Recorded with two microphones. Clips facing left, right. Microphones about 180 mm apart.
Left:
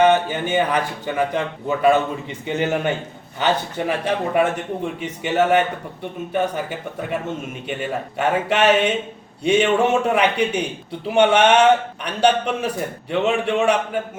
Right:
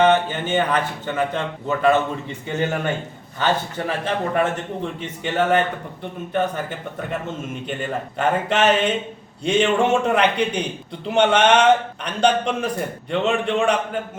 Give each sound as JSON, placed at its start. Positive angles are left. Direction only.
{"t": 0.0, "sound": "a man's voice", "side_deg": 10}